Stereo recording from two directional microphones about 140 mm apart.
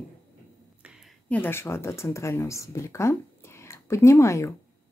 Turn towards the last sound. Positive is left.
turn(degrees=20)  # may be behind; listen again after turning